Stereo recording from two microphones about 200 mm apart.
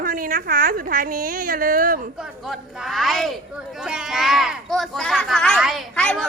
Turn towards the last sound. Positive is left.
turn(degrees=5)  # may be behind; listen again after turning